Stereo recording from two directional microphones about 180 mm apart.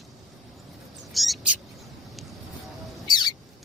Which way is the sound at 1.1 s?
Centre (ahead or behind).